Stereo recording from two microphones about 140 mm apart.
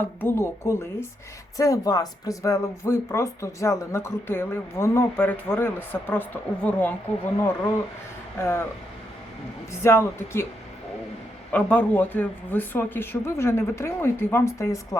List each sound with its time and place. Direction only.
0.2 s speech: 15° left (ahead or behind)
9.8 s speech: 15° left (ahead or behind)
11.5 s speech: 10° left (ahead or behind)